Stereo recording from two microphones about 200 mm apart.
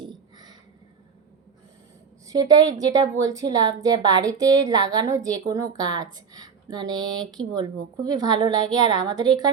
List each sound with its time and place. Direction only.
2.2 s a woman's voice: 20° right (ahead or behind)